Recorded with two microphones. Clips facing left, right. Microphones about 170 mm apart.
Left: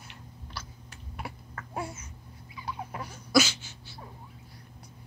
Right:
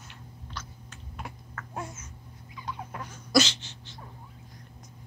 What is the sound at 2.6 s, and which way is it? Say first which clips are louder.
Turkey: left 1 dB; 10° left (ahead or behind).